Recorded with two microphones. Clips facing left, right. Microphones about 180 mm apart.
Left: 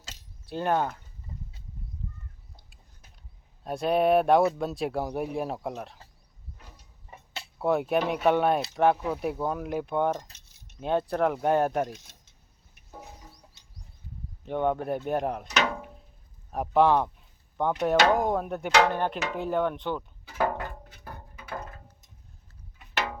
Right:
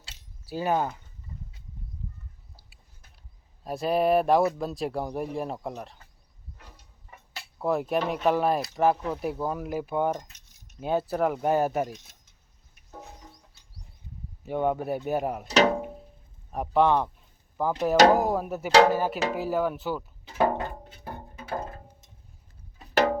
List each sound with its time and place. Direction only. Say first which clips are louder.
0.4 s speech: even; 5° right (ahead or behind)
3.6 s speech: left 1 dB; centre (ahead or behind)
7.6 s speech: left 1 dB; centre (ahead or behind)
10.2 s keys jangling: left 1 dB; 30° left (ahead or behind)
10.8 s speech: even; 5° right (ahead or behind)
14.4 s speech: even; 5° right (ahead or behind)
15.4 s music: right 7 dB; 30° right (ahead or behind)
16.5 s speech: left 1 dB; centre (ahead or behind)
17.9 s speech: right 5 dB; 35° right (ahead or behind)
18.2 s speech: right 1 dB; 5° right (ahead or behind)
20.2 s music: right 4 dB; 25° right (ahead or behind)
22.8 s music: right 9 dB; 40° right (ahead or behind)